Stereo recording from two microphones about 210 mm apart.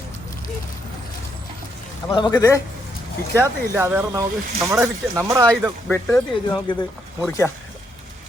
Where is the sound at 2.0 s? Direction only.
20° left (ahead or behind).